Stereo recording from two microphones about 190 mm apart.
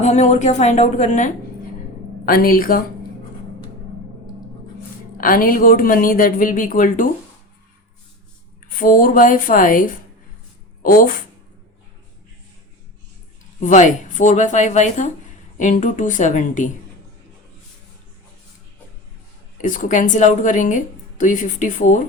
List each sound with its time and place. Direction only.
0.0 s speech: 35° left (ahead or behind)
2.2 s speech: 50° left (ahead or behind)
5.1 s speech: 50° left (ahead or behind)
8.8 s speech: 45° left (ahead or behind)
13.6 s speech: 40° left (ahead or behind)
19.6 s speech: 45° left (ahead or behind)